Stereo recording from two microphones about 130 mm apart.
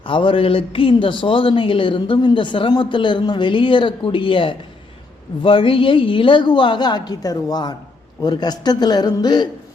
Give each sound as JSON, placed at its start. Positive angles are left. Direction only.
{"t": 0.0, "sound": "speech", "side_deg": 40}